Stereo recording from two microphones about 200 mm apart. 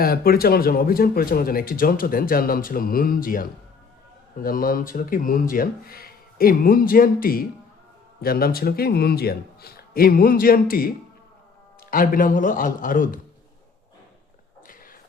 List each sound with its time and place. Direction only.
0.0 s speech: 50° left (ahead or behind)